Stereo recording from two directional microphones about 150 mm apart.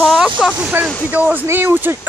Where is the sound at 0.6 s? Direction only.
5° right (ahead or behind).